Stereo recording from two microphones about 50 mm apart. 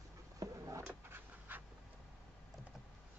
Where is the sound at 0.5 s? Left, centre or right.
Right.